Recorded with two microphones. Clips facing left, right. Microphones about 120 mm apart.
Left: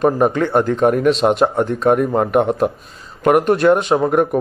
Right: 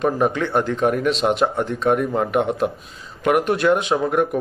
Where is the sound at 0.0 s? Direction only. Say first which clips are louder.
Left 4 dB; 40° left (ahead or behind).